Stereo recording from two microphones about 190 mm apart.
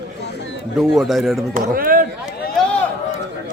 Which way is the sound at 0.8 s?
Centre (ahead or behind).